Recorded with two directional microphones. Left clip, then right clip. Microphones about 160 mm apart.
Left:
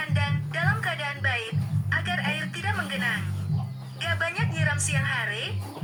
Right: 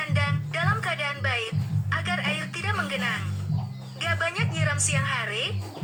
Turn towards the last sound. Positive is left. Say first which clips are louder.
# right 1 dB
turn(degrees=-20)  # may be behind; listen again after turning